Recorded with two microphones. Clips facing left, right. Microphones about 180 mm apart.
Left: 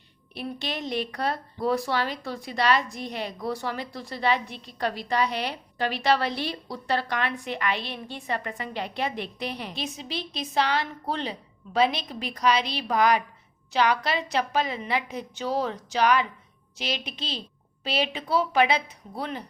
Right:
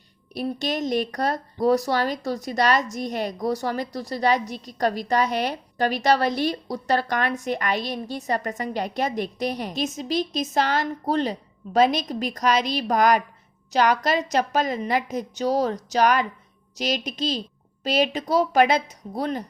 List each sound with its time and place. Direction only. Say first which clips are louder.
0.3 s speech: right 7 dB; 45° right (ahead or behind)